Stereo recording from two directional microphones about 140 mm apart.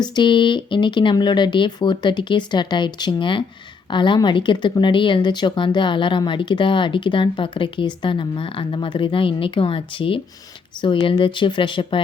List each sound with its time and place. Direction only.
0.0 s speech: 35° left (ahead or behind)